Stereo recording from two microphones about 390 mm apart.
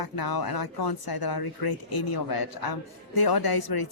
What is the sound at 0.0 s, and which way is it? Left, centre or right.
Speech, left.